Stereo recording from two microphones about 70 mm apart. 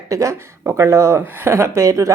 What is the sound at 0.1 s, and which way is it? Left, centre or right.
Speech, right.